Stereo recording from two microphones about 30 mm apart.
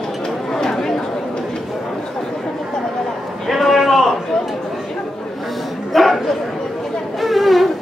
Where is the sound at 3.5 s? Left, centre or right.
Centre.